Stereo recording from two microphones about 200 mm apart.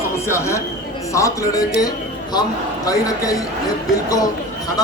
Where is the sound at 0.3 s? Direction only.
15° left (ahead or behind).